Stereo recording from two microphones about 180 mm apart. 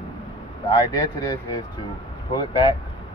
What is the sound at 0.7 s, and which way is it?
Speech, 20° left (ahead or behind).